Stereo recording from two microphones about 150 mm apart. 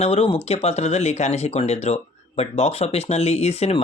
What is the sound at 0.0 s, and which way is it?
Speech, 40° left (ahead or behind).